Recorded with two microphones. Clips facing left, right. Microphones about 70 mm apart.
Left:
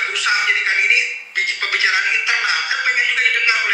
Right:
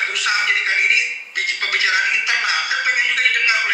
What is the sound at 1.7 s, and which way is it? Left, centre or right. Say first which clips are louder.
Music: left 1 dB; left.